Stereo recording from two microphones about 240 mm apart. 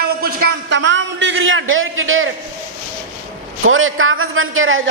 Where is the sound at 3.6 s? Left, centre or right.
Right.